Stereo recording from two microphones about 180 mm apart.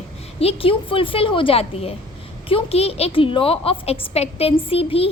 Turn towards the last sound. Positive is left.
turn(degrees=35)  # may be behind; listen again after turning